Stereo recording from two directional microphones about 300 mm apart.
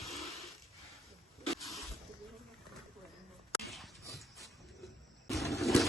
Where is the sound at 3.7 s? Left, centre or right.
Centre.